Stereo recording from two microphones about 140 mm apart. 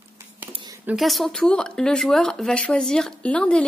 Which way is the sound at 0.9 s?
Centre (ahead or behind).